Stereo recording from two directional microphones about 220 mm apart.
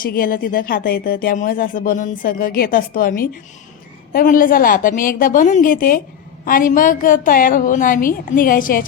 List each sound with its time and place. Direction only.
0.0 s speech: 40° left (ahead or behind)